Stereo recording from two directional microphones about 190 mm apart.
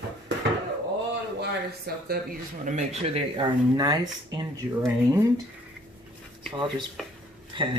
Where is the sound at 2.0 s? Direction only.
50° right (ahead or behind).